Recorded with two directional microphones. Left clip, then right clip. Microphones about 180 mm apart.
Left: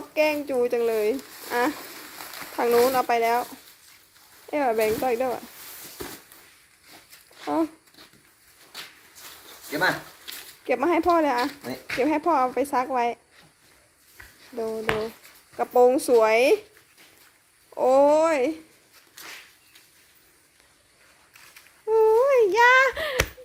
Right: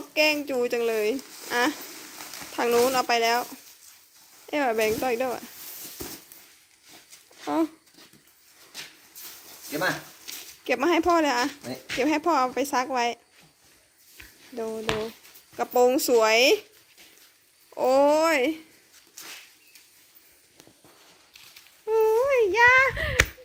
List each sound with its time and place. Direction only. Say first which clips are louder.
0.1 s a woman's voice: even; centre (ahead or behind)
7.4 s speech: left 1 dB; 5° right (ahead or behind)
9.7 s speech: left 3 dB; 25° right (ahead or behind)
10.6 s a woman's voice: left 1 dB; centre (ahead or behind)
14.5 s a woman's voice: left 2 dB; 5° right (ahead or behind)
17.7 s speech: left 2 dB; centre (ahead or behind)
21.8 s a sound: left 3 dB; 5° left (ahead or behind)